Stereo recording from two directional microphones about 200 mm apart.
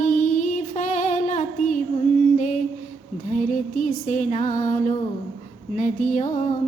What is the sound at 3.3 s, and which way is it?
Music, 40° left (ahead or behind).